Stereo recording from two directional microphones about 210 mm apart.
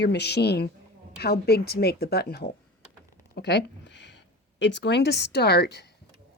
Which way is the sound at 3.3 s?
50° left (ahead or behind).